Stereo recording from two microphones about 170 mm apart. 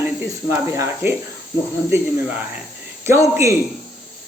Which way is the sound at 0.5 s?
15° right (ahead or behind).